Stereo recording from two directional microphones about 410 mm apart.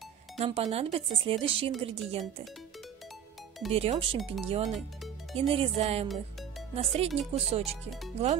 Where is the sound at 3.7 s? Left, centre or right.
Centre.